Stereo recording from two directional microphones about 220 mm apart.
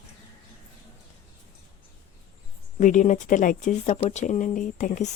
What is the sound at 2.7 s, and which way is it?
Speech, 35° left (ahead or behind).